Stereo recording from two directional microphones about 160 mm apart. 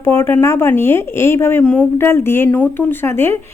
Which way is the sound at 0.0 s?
15° left (ahead or behind).